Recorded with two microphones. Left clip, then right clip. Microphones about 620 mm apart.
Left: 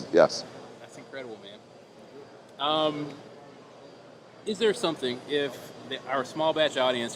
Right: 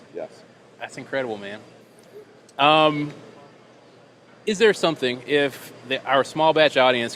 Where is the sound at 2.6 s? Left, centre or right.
Right.